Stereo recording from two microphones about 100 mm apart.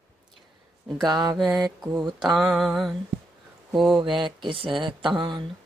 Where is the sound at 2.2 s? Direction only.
5° right (ahead or behind).